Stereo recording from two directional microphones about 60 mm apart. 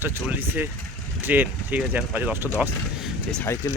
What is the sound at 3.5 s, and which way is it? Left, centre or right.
Speech, left.